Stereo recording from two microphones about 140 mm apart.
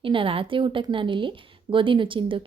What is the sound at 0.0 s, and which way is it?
A woman's voice, 40° right (ahead or behind).